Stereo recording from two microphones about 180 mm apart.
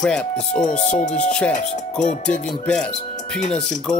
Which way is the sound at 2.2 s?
5° left (ahead or behind).